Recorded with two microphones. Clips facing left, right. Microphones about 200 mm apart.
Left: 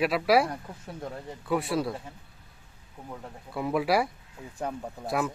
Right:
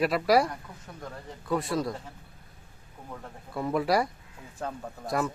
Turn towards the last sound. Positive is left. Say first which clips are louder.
# even
turn(degrees=5)  # may be behind; listen again after turning